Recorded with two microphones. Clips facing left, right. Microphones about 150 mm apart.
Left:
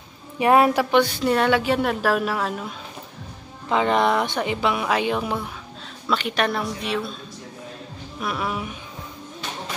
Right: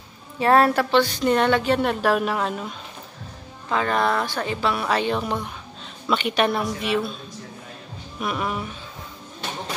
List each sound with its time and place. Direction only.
0.4 s a woman's voice: 15° left (ahead or behind)
3.6 s a woman's voice: 20° left (ahead or behind); by 7.1 s centre (ahead or behind)
8.2 s a woman's voice: centre (ahead or behind)